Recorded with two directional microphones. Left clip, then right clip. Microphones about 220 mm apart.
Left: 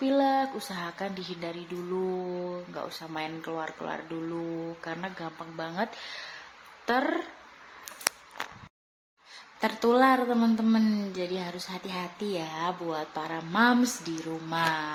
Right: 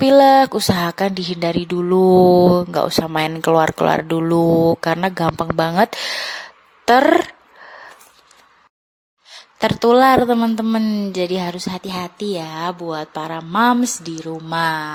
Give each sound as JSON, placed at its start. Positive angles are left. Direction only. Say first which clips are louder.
{"t": 0.0, "sound": "speech", "louder": "right 16 dB", "side_deg": -50}
{"t": 9.3, "sound": "speech", "louder": "right 11 dB", "side_deg": -40}